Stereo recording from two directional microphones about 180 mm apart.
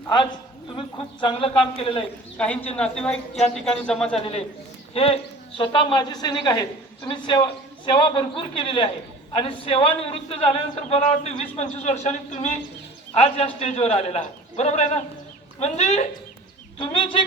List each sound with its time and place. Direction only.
0.8 s speech: 30° left (ahead or behind)
2.4 s a man's voice: 10° left (ahead or behind)
4.2 s a man's voice: 35° left (ahead or behind)